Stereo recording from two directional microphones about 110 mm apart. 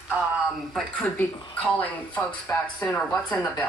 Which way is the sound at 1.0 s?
15° left (ahead or behind).